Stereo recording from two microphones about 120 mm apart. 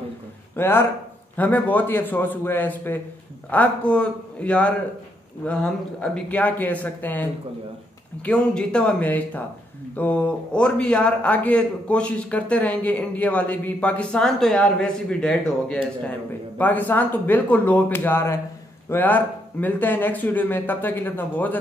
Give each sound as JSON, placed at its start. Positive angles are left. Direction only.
{"t": 0.6, "sound": "a man's voice", "side_deg": 20}
{"t": 8.3, "sound": "a man's voice", "side_deg": 10}